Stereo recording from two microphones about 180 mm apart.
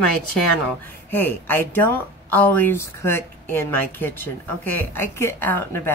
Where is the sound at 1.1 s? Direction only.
10° left (ahead or behind).